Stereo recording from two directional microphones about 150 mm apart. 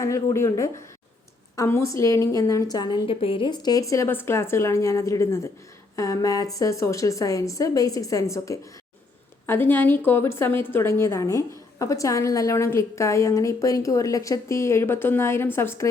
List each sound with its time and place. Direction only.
0.0 s a woman's voice: 20° left (ahead or behind)